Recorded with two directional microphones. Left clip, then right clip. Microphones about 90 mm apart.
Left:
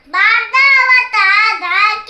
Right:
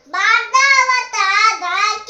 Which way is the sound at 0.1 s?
45° right (ahead or behind).